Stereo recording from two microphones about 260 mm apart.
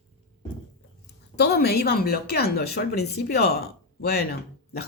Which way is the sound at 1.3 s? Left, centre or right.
Left.